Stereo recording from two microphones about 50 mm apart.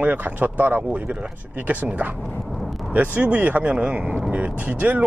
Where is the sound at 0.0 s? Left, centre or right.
Right.